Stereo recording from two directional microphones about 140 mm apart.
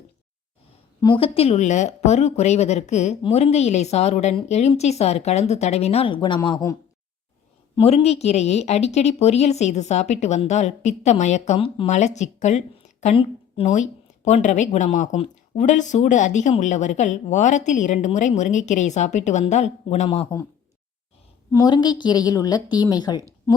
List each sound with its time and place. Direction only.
1.0 s speech: 40° left (ahead or behind)
7.8 s speech: 45° left (ahead or behind)
13.6 s speech: 45° left (ahead or behind)
14.3 s a woman's voice: 55° left (ahead or behind)
20.3 s a woman's voice: 25° left (ahead or behind)
21.5 s a woman's voice: 30° left (ahead or behind)